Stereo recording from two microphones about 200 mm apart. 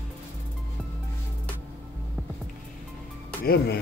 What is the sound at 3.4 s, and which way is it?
Speech, 55° left (ahead or behind).